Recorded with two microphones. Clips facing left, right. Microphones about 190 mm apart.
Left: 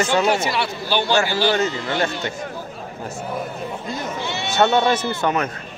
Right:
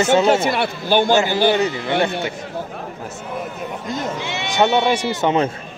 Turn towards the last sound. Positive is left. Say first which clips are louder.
# right 4 dB
turn(degrees=-25)  # may be behind; listen again after turning